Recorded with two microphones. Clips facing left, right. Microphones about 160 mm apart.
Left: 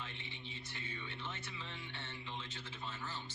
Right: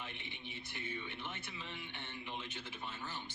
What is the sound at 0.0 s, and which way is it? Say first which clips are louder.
Speech: right 1 dB; 15° right (ahead or behind).